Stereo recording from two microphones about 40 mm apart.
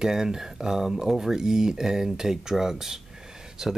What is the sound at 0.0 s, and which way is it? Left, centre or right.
Speech, centre.